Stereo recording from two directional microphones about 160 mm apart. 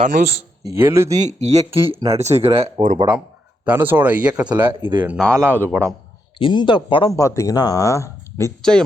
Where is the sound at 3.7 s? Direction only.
15° right (ahead or behind).